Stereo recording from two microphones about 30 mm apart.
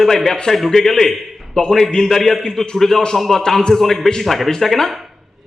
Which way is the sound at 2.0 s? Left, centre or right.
Centre.